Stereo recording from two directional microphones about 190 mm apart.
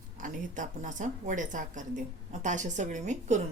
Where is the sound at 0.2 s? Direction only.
40° right (ahead or behind).